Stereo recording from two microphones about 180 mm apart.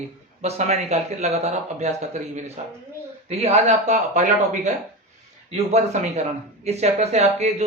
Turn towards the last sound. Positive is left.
turn(degrees=-40)  # may be behind; listen again after turning